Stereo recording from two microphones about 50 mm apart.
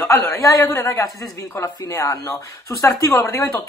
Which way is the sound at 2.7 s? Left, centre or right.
Left.